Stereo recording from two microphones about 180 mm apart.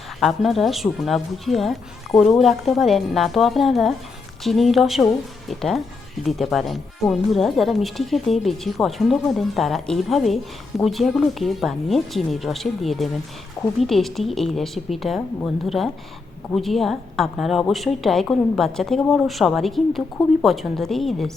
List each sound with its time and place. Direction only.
0.2 s speech: centre (ahead or behind)
16.6 s speech: centre (ahead or behind)